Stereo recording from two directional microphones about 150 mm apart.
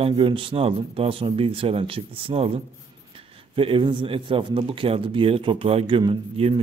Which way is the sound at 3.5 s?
35° right (ahead or behind).